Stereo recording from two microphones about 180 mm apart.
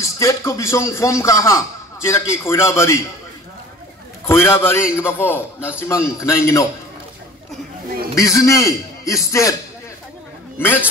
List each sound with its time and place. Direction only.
0.0 s speech: 15° left (ahead or behind)
4.3 s speech: 15° left (ahead or behind)
8.1 s speech: 15° left (ahead or behind)